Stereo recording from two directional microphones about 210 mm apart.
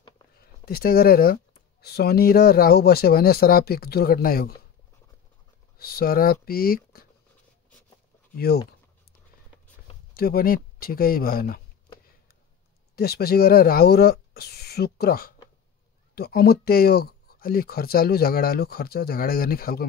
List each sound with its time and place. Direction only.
0.3 s speech: 45° left (ahead or behind)
5.8 s speech: 45° left (ahead or behind)
8.4 s speech: 50° left (ahead or behind)
10.1 s speech: 45° left (ahead or behind)
12.9 s speech: 50° left (ahead or behind)